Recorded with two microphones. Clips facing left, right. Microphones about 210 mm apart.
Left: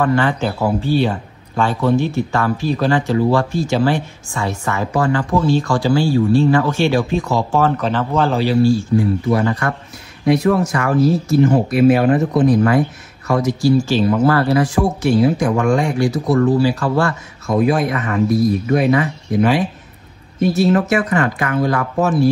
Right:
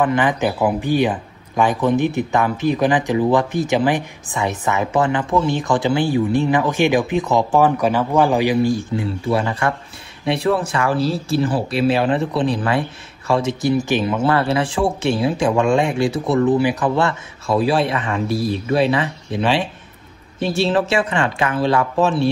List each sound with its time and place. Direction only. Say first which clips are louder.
0.0 s speech: left 1 dB; 15° right (ahead or behind)
10.6 s speech: left 4 dB; 30° right (ahead or behind)
12.1 s speech: left 4 dB; 45° left (ahead or behind)
13.3 s speech: left 3 dB; 25° right (ahead or behind)
17.6 s speech: left 2 dB; 30° right (ahead or behind)